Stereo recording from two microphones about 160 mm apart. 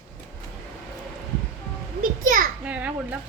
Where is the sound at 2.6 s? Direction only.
10° right (ahead or behind).